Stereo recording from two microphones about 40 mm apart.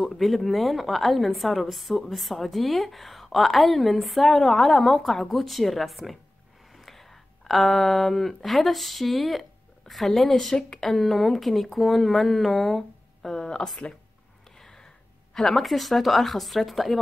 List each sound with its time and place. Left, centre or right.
0.0 s a woman's voice: centre
11.0 s a woman's voice: centre
13.3 s speech: centre
14.6 s a sound: centre
15.3 s a woman's voice: centre